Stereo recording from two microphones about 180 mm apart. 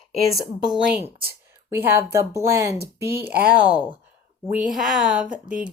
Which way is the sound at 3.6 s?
20° left (ahead or behind).